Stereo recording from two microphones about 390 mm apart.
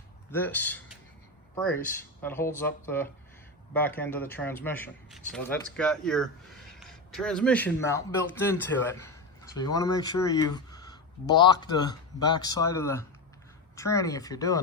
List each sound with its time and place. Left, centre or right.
0.3 s a man's voice: centre